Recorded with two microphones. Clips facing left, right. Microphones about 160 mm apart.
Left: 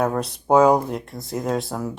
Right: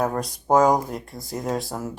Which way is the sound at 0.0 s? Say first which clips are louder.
Left 2 dB; centre (ahead or behind).